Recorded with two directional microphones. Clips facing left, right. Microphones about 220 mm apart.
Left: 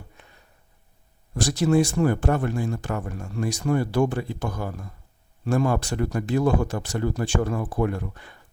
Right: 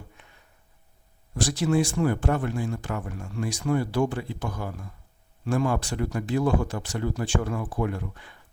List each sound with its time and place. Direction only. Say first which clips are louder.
1.5 s speech: left 4 dB; 40° left (ahead or behind)